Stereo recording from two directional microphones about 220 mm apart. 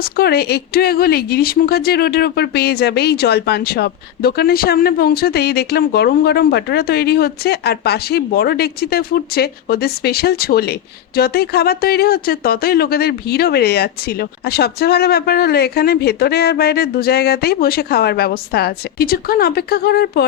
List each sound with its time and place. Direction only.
0.0 s speech: 45° left (ahead or behind)